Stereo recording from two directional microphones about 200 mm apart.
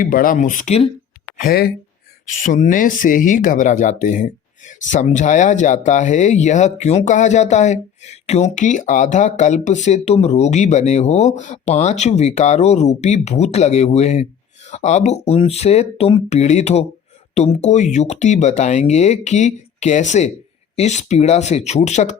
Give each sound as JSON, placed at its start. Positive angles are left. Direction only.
{"t": 0.0, "sound": "speech", "side_deg": 45}
{"t": 1.4, "sound": "speech", "side_deg": 50}
{"t": 2.4, "sound": "speech", "side_deg": 40}